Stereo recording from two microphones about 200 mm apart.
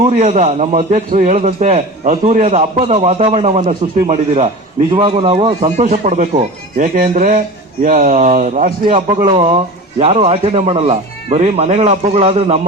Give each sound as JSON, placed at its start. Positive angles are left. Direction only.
{"t": 0.0, "sound": "a man's voice", "side_deg": -35}
{"t": 5.5, "sound": "a man's voice", "side_deg": -35}
{"t": 8.9, "sound": "speech", "side_deg": -25}